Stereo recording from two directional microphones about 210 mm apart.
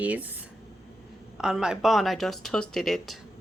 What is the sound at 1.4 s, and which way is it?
Speech, 5° right (ahead or behind).